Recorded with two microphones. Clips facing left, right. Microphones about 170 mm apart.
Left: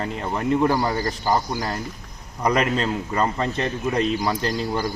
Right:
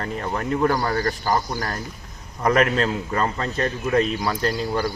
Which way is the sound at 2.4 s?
10° left (ahead or behind).